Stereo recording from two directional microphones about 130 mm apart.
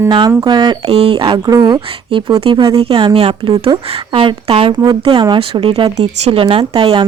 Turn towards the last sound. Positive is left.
turn(degrees=-40)  # may be behind; listen again after turning